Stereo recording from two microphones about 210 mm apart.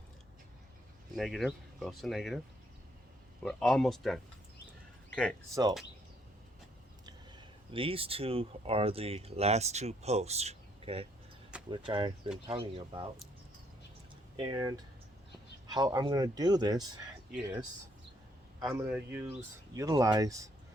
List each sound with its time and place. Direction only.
1.1 s speech: centre (ahead or behind)
3.4 s speech: centre (ahead or behind)
7.0 s speech: 25° right (ahead or behind)
14.3 s speech: 20° right (ahead or behind)
18.6 s speech: 10° right (ahead or behind)